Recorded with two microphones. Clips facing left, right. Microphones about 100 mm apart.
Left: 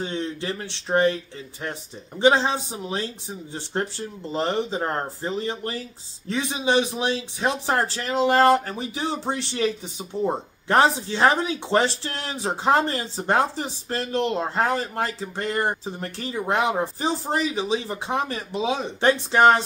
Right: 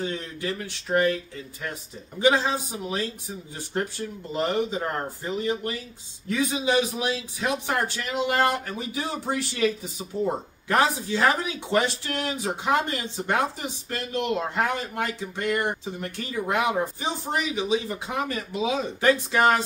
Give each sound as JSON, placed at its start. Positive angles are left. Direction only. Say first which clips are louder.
{"t": 0.0, "sound": "a man's voice", "louder": "left 2 dB", "side_deg": 25}